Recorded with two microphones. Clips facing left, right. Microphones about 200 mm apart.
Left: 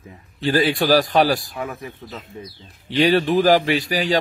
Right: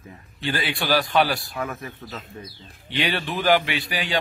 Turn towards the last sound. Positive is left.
turn(degrees=40)  # may be behind; listen again after turning